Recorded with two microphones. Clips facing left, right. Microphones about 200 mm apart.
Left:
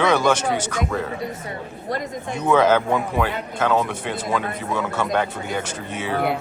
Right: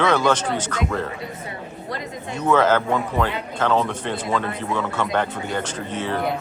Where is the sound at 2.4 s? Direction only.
15° left (ahead or behind).